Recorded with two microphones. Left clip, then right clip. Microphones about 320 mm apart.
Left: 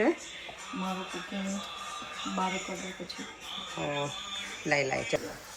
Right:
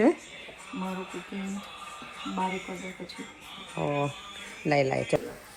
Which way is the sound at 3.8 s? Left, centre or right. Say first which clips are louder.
Right 5 dB; centre.